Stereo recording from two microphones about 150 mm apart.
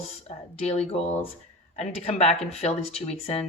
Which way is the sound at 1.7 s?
45° left (ahead or behind).